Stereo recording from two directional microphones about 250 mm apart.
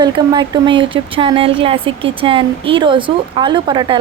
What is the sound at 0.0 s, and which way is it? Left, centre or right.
Speech, centre.